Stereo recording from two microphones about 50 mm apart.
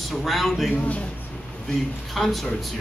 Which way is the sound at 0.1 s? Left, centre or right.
Centre.